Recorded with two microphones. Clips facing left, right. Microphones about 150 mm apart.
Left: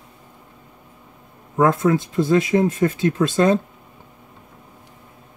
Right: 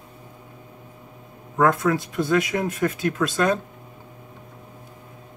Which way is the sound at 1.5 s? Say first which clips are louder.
Left 3 dB; 25° left (ahead or behind).